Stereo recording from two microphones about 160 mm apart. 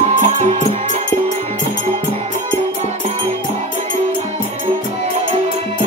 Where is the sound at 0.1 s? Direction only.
45° right (ahead or behind).